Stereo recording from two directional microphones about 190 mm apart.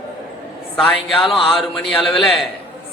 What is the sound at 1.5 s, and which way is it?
Speech, centre (ahead or behind).